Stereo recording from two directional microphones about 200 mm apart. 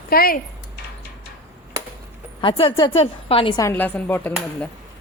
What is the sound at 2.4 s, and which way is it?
A woman's voice, 25° left (ahead or behind).